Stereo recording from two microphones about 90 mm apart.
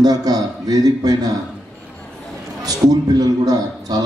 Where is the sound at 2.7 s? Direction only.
45° right (ahead or behind).